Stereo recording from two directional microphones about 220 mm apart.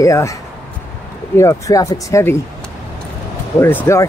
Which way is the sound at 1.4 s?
15° left (ahead or behind).